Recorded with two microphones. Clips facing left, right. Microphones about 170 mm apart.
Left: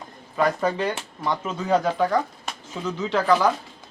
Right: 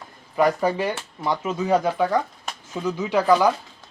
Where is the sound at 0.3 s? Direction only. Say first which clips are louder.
Right 2 dB; 10° right (ahead or behind).